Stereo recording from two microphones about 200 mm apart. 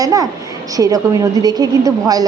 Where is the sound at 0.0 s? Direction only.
15° right (ahead or behind).